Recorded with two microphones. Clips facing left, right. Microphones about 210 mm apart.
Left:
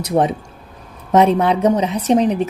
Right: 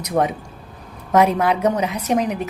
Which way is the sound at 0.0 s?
30° left (ahead or behind).